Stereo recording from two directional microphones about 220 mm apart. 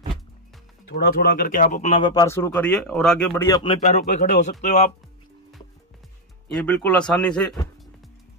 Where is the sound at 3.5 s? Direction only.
20° left (ahead or behind).